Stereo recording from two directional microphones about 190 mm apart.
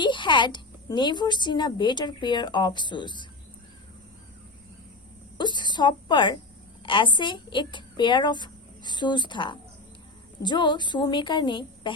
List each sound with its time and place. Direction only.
0.0 s a woman's voice: 25° left (ahead or behind)
5.4 s a woman's voice: 25° left (ahead or behind)